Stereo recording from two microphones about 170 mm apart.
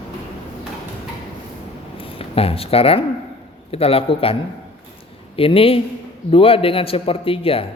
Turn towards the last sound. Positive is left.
turn(degrees=35)  # may be behind; listen again after turning